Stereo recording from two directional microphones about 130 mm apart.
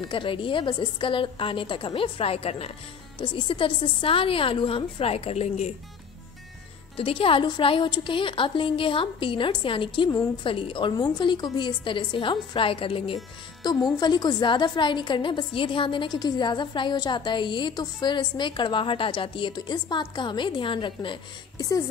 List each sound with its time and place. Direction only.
0.0 s a woman's voice: 40° left (ahead or behind)
3.2 s a woman's voice: 40° left (ahead or behind)
7.0 s a woman's voice: 45° left (ahead or behind)
13.8 s a woman's voice: 35° left (ahead or behind)